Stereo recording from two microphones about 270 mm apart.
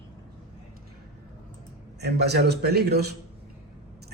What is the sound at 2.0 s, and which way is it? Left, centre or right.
Speech, right.